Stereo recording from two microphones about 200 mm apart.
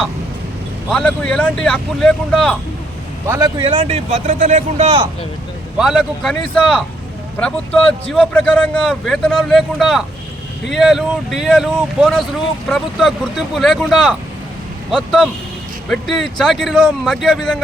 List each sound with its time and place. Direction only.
0.9 s speech: 5° left (ahead or behind)
3.2 s speech: 15° right (ahead or behind)
3.6 s speech: 25° right (ahead or behind)
5.7 s speech: centre (ahead or behind)